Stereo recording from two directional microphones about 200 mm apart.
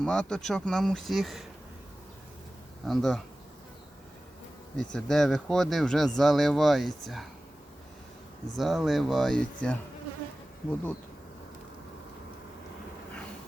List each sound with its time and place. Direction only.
0.0 s speech: 5° left (ahead or behind)
2.8 s speech: centre (ahead or behind)
4.8 s speech: 5° left (ahead or behind)
8.5 s speech: centre (ahead or behind)